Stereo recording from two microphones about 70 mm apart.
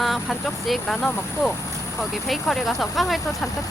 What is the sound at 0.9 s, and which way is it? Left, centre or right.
Speech, left.